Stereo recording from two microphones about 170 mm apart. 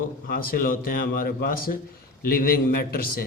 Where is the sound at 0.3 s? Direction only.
60° left (ahead or behind).